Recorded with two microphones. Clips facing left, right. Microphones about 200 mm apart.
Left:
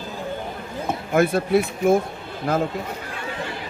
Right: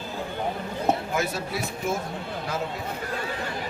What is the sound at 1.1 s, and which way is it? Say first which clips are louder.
Speech: left 10 dB; 55° left (ahead or behind).